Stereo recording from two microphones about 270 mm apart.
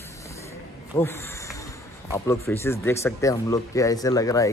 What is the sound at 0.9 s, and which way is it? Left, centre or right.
Speech, centre.